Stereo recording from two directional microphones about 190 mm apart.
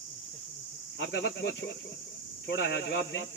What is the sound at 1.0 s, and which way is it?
Speech, 65° left (ahead or behind).